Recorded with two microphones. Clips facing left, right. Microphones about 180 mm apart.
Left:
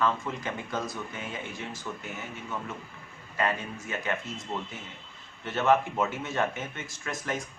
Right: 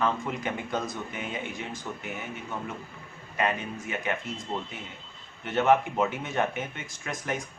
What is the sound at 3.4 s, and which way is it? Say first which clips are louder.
Speech: right 1 dB; 20° right (ahead or behind).